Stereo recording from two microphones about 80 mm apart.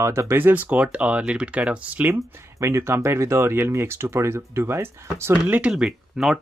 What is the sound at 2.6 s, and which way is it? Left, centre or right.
Speech, right.